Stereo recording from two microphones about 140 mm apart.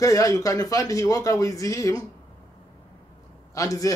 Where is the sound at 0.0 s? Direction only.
25° left (ahead or behind).